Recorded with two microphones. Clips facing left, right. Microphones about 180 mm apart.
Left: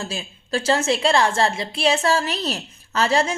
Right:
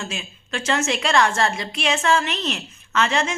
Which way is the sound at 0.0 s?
35° left (ahead or behind).